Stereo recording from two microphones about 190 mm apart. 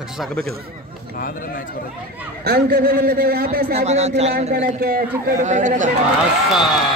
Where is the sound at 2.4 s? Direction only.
60° right (ahead or behind).